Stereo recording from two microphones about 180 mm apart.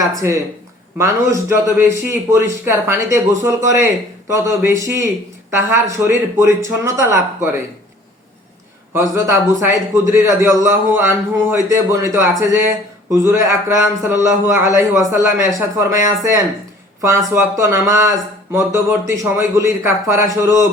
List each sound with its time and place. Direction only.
0.2 s speech: 15° right (ahead or behind)
8.9 s speech: 15° right (ahead or behind)
17.0 s speech: 15° right (ahead or behind)